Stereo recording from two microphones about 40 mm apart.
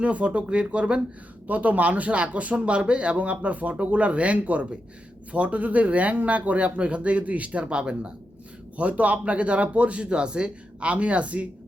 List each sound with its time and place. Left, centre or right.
0.0 s speech: right
1.5 s speech: right
8.8 s speech: right